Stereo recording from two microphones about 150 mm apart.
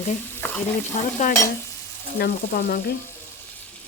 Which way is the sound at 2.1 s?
90° left.